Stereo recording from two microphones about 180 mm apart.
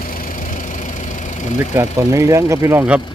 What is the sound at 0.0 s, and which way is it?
Engine, 50° left (ahead or behind).